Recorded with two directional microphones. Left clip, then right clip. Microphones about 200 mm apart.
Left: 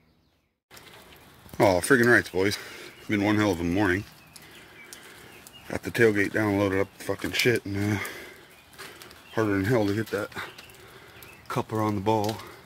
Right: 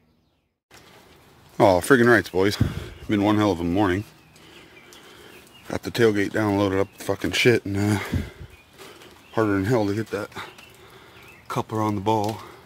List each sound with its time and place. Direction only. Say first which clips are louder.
1.6 s speech: right 4 dB; 25° right (ahead or behind)
5.7 s speech: right 2 dB; 20° right (ahead or behind)
9.3 s speech: right 3 dB; 15° right (ahead or behind)